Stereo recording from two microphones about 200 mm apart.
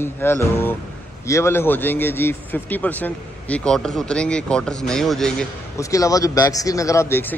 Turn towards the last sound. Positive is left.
turn(degrees=10)  # may be behind; listen again after turning